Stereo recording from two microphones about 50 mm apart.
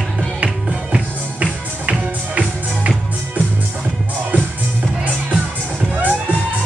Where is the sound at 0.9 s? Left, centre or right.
Right.